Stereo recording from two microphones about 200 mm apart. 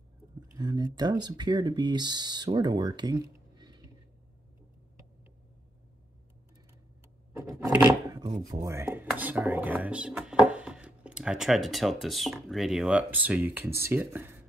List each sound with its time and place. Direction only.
0.6 s speech: 20° right (ahead or behind)
8.1 s speech: 20° right (ahead or behind)